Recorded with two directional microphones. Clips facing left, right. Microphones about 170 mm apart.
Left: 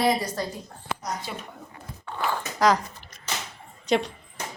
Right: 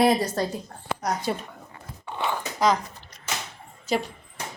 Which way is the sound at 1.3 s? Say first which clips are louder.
Right 8 dB; 45° right (ahead or behind).